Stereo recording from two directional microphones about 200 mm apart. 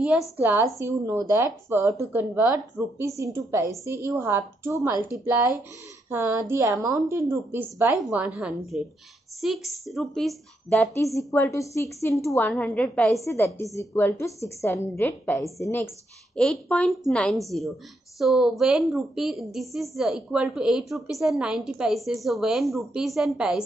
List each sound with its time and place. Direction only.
0.4 s a woman's voice: 10° right (ahead or behind)
11.1 s a woman's voice: 15° left (ahead or behind); by 23.6 s 5° right (ahead or behind)